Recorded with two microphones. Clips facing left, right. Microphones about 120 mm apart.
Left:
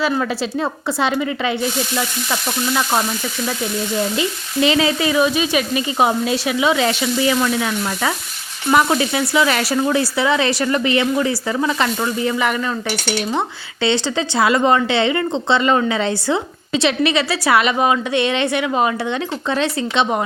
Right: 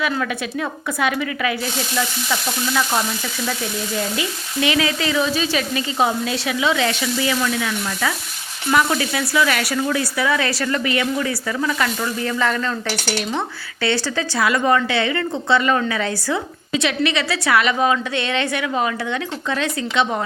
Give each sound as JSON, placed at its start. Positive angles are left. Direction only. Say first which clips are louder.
{"t": 0.0, "sound": "speech", "louder": "left 3 dB", "side_deg": 30}
{"t": 4.6, "sound": "speech", "louder": "left 4 dB", "side_deg": 25}
{"t": 13.8, "sound": "speech", "louder": "left 3 dB", "side_deg": 25}